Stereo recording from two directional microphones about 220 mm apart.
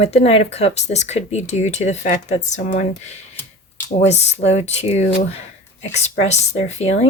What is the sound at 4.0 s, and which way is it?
Speech, 30° left (ahead or behind).